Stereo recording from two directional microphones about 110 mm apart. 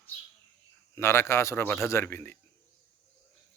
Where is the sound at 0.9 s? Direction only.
25° left (ahead or behind).